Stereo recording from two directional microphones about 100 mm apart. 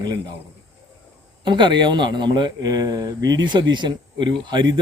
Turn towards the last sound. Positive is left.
turn(degrees=-50)  # may be behind; listen again after turning